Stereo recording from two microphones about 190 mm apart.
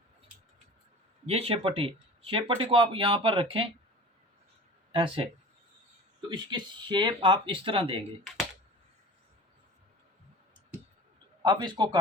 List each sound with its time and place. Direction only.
1.3 s speech: 35° right (ahead or behind)
4.9 s speech: 25° right (ahead or behind)
6.3 s speech: 25° right (ahead or behind)
11.4 s speech: 25° right (ahead or behind)